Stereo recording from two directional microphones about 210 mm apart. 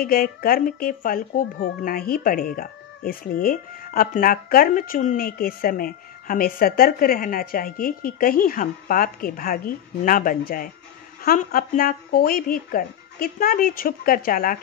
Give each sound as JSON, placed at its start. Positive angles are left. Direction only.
{"t": 0.0, "sound": "speech", "side_deg": 45}